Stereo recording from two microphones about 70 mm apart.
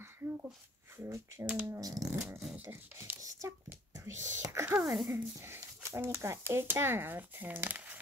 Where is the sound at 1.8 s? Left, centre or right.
Right.